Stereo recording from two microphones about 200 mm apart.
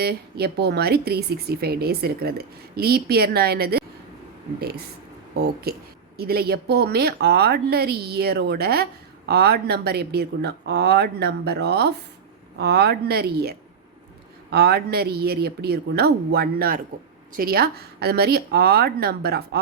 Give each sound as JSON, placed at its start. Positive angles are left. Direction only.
{"t": 0.0, "sound": "speech", "side_deg": -50}
{"t": 5.4, "sound": "speech", "side_deg": -50}